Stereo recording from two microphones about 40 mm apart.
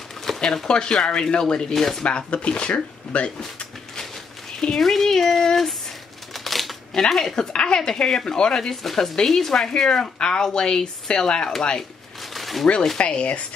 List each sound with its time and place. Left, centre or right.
0.2 s a sound: centre
0.7 s speech: left
1.7 s speech: centre
2.0 s speech: left
4.7 s speech: centre
6.3 s a sound: centre
6.9 s speech: centre
8.8 s speech: centre
10.1 s speech: left
12.4 s a sound: centre
12.9 s speech: left